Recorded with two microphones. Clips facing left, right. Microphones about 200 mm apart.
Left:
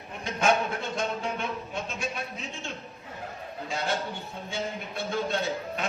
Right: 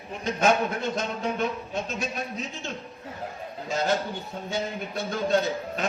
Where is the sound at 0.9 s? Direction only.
40° right (ahead or behind).